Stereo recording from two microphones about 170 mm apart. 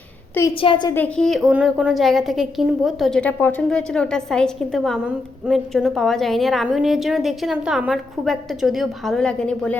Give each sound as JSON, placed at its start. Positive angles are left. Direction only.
{"t": 0.6, "sound": "a woman's voice", "side_deg": 30}
{"t": 0.9, "sound": "a woman's voice", "side_deg": 5}